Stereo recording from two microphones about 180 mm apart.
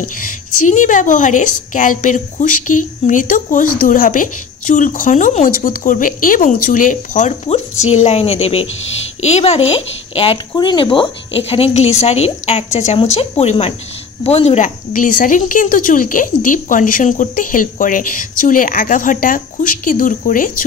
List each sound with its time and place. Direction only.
0.2 s a woman's voice: 45° left (ahead or behind)
14.9 s a woman's voice: 50° left (ahead or behind)